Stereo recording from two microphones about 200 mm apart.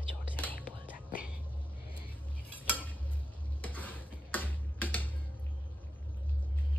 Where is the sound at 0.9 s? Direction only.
45° left (ahead or behind).